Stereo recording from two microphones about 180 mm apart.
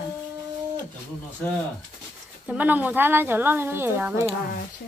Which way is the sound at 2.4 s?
10° right (ahead or behind).